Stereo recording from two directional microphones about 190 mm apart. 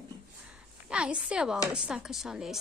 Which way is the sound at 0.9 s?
5° right (ahead or behind).